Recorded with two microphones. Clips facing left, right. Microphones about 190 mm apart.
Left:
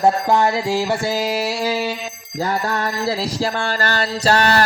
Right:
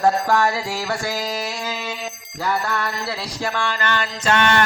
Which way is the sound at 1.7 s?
35° left (ahead or behind).